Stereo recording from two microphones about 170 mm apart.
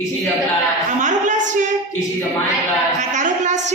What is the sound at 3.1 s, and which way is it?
Speech, 45° right (ahead or behind).